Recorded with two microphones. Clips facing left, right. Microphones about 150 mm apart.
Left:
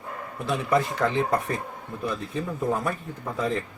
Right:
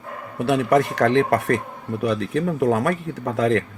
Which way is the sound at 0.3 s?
70° right (ahead or behind).